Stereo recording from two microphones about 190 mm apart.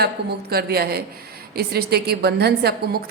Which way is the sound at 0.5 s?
55° right (ahead or behind).